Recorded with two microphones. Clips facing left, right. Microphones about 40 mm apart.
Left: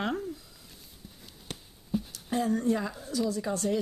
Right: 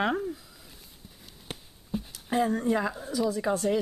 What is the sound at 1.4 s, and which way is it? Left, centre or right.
Speech, centre.